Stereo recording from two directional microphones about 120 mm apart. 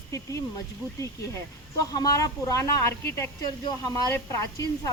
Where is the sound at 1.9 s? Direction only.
30° left (ahead or behind).